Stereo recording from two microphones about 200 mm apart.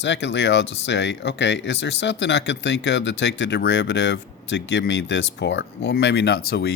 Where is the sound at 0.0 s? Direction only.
60° left (ahead or behind).